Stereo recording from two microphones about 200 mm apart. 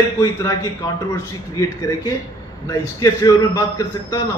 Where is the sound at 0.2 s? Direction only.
15° left (ahead or behind).